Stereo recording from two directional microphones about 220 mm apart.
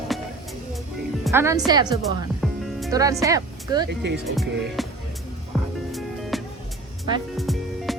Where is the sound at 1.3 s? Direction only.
15° right (ahead or behind).